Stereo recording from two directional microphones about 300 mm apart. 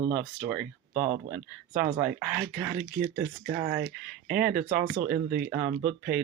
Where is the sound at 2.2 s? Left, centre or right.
Centre.